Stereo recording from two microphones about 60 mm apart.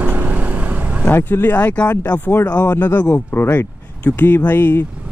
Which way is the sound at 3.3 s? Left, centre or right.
Left.